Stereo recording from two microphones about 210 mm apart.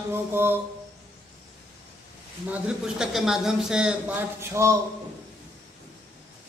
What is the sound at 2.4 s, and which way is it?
Speech, 5° right (ahead or behind).